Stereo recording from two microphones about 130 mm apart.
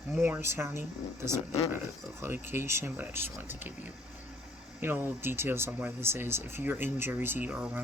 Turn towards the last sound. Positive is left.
turn(degrees=-10)  # may be behind; listen again after turning